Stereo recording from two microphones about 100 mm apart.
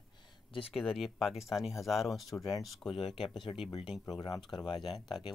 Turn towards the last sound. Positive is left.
turn(degrees=55)  # may be behind; listen again after turning